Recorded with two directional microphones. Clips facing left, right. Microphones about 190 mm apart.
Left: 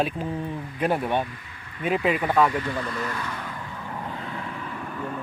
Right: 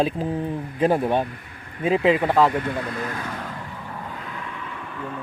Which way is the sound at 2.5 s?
55° right (ahead or behind).